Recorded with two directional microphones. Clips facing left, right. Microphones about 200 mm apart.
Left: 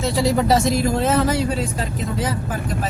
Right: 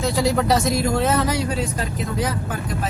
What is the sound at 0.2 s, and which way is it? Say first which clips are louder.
Speech: left 2 dB; centre (ahead or behind).